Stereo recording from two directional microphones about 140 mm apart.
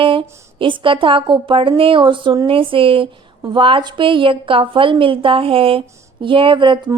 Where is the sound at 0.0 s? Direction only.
35° right (ahead or behind).